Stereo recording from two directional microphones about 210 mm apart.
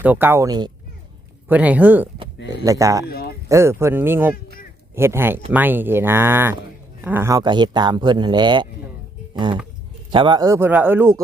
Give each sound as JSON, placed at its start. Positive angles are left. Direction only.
{"t": 0.0, "sound": "speech", "side_deg": -10}
{"t": 1.5, "sound": "speech", "side_deg": -5}
{"t": 3.1, "sound": "speech", "side_deg": 45}
{"t": 3.5, "sound": "speech", "side_deg": -10}
{"t": 10.1, "sound": "speech", "side_deg": -20}